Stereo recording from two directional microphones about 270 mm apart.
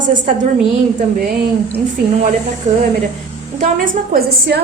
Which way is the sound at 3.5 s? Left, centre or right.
Right.